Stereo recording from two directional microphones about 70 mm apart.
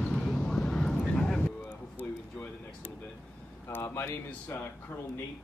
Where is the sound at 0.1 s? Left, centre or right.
Centre.